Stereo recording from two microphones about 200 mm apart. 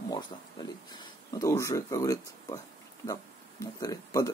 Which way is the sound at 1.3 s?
15° left (ahead or behind).